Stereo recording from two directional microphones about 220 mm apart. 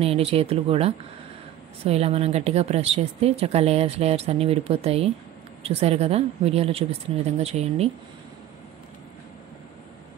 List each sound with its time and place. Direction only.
0.0 s speech: 25° right (ahead or behind)